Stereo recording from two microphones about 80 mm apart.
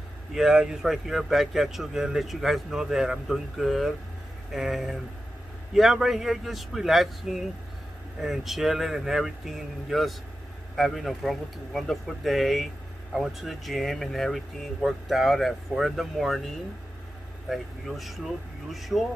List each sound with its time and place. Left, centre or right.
0.3 s speech: centre